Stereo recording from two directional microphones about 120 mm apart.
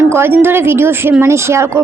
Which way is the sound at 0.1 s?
20° right (ahead or behind).